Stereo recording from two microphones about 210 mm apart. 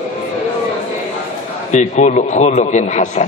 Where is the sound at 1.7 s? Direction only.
35° left (ahead or behind).